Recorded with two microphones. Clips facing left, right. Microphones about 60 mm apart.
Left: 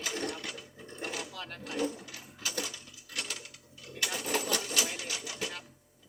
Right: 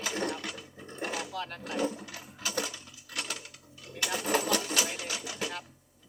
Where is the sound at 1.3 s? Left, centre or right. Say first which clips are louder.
Right 5 dB; centre.